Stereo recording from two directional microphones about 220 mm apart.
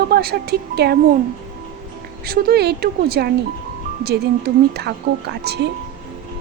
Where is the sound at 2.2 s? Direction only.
45° right (ahead or behind).